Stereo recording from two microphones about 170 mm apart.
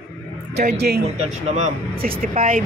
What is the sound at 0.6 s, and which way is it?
Speech, 70° right (ahead or behind).